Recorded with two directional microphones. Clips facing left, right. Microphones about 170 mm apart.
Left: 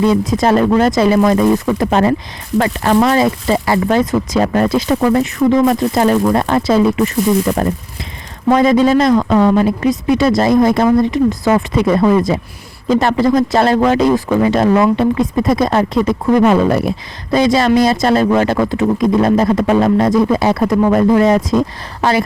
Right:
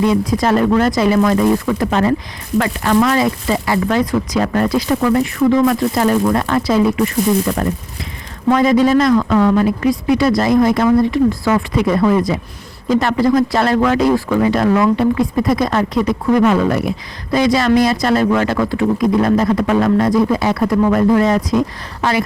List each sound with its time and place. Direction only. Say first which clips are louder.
0.0 s speech: left 2 dB; 25° left (ahead or behind)
8.4 s speech: left 2 dB; 25° left (ahead or behind)